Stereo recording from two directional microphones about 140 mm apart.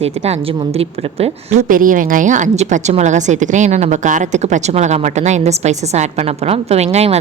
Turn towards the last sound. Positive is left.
turn(degrees=-50)  # may be behind; listen again after turning